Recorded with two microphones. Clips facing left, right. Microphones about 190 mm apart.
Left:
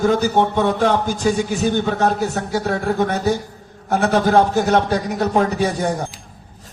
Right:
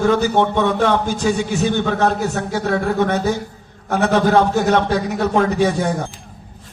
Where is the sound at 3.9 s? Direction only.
45° left (ahead or behind).